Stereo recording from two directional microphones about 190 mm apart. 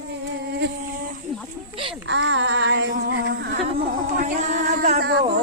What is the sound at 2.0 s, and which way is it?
Female singing, 75° right (ahead or behind).